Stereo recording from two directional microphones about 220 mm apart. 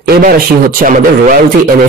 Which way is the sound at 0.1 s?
40° right (ahead or behind).